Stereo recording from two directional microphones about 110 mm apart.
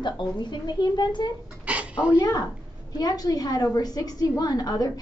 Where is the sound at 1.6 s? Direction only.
10° right (ahead or behind).